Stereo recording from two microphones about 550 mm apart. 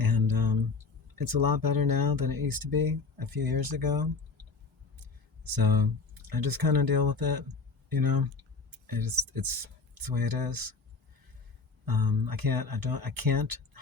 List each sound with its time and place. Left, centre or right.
0.0 s a sound: right
1.1 s speech: right
11.9 s speech: right